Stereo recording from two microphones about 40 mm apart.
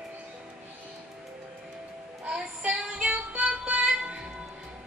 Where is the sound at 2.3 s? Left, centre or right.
Right.